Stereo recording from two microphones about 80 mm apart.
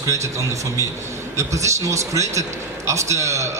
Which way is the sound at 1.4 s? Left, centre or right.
Right.